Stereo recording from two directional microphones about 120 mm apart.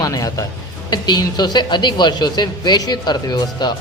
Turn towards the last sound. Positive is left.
turn(degrees=35)  # may be behind; listen again after turning